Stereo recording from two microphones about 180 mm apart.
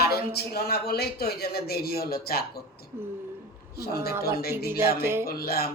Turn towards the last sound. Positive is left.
turn(degrees=60)  # may be behind; listen again after turning